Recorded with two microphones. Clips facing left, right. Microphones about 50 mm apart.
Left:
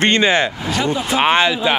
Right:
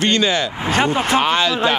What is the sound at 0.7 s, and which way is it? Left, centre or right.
Speech, right.